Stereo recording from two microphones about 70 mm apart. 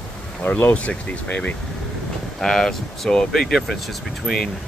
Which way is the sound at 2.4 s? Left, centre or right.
Centre.